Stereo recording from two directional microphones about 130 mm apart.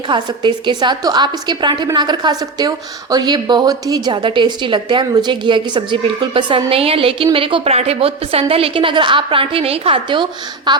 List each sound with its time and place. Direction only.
0.1 s a woman's voice: 35° right (ahead or behind)